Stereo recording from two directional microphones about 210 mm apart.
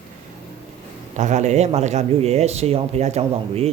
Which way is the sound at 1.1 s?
35° right (ahead or behind).